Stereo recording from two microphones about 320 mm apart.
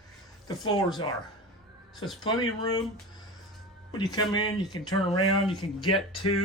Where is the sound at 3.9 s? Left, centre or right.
Centre.